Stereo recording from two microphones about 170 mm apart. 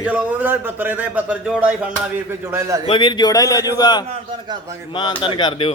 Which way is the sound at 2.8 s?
30° left (ahead or behind).